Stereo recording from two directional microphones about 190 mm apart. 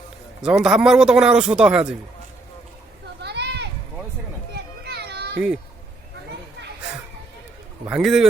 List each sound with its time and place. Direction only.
0.4 s speech: 5° right (ahead or behind)
3.2 s children playing: 60° right (ahead or behind)
7.9 s speech: 5° right (ahead or behind)